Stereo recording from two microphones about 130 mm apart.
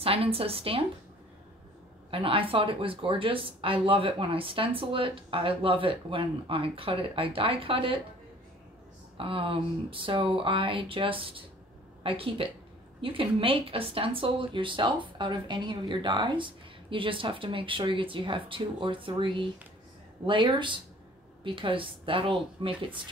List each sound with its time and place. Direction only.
0.0 s speech: 50° right (ahead or behind)
2.0 s speech: 45° right (ahead or behind)
9.1 s speech: 40° right (ahead or behind)